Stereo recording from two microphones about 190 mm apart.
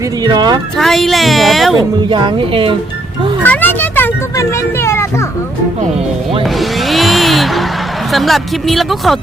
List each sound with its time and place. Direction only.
0.2 s speech: 20° right (ahead or behind)
0.8 s speech: centre (ahead or behind)
2.0 s speech: 25° right (ahead or behind)
3.4 s vehicle: 10° left (ahead or behind)
6.4 s vehicle: centre (ahead or behind)
8.1 s speech: centre (ahead or behind)